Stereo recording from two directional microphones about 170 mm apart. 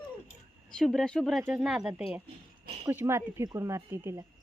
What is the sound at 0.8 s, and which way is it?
Speech, 5° left (ahead or behind).